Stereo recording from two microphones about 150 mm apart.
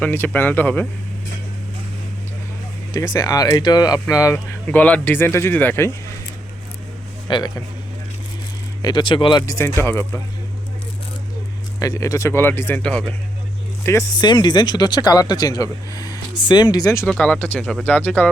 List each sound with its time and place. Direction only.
0.0 s speech: 15° left (ahead or behind)
2.9 s speech: 25° left (ahead or behind)
4.6 s speech: 10° left (ahead or behind)
7.3 s speech: 30° left (ahead or behind)
8.8 s speech: 30° left (ahead or behind)
9.5 s speech: 20° left (ahead or behind)
11.8 s speech: 20° left (ahead or behind)
13.8 s speech: 20° left (ahead or behind)
14.3 s speech: 30° left (ahead or behind)
17.1 s speech: 5° left (ahead or behind)